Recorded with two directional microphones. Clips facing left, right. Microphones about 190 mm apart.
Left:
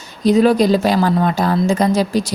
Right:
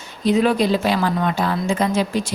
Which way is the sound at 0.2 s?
40° left (ahead or behind).